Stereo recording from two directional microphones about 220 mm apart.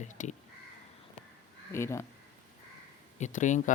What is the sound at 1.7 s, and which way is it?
Speech, 10° left (ahead or behind).